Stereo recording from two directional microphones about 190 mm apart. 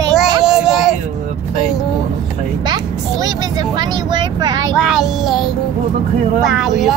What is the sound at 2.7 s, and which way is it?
Vehicle, 20° right (ahead or behind).